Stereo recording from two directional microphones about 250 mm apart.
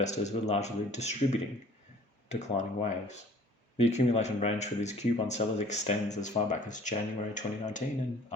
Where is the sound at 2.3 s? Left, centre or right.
Left.